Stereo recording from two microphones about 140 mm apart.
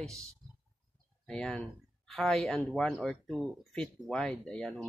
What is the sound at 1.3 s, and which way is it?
Speech, 5° left (ahead or behind).